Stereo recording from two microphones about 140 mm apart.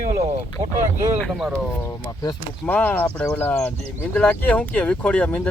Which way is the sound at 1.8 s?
25° left (ahead or behind).